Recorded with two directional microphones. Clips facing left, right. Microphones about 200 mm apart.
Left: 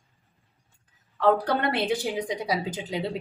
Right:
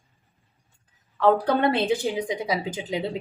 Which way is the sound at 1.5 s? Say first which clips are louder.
Right 4 dB; 20° right (ahead or behind).